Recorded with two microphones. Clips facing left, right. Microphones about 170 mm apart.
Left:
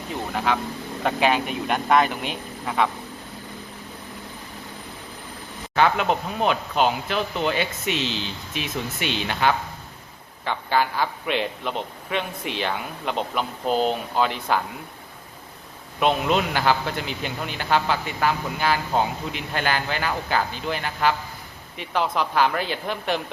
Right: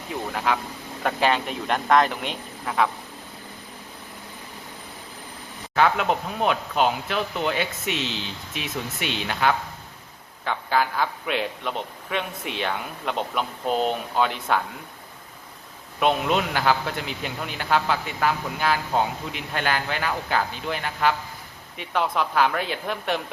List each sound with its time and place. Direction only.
0.3 s a man's voice: centre (ahead or behind)
5.7 s a man's voice: centre (ahead or behind)
16.0 s a man's voice: centre (ahead or behind)